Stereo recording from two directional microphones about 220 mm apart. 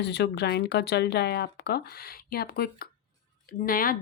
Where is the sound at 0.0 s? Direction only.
50° left (ahead or behind).